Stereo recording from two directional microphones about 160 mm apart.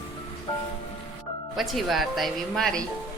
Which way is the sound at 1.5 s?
Centre (ahead or behind).